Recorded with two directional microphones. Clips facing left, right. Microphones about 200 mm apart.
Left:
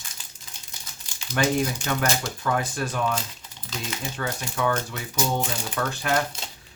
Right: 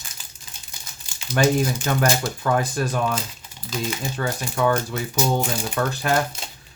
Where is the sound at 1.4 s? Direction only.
40° right (ahead or behind).